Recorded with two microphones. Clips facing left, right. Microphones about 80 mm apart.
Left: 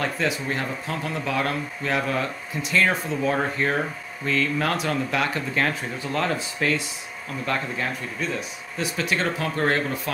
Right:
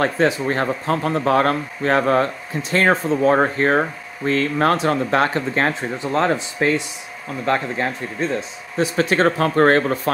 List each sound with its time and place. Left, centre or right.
0.0 s speech: right